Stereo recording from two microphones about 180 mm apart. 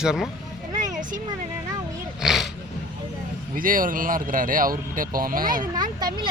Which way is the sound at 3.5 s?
50° right (ahead or behind).